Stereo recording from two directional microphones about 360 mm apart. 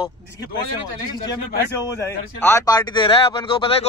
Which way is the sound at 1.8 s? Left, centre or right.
Centre.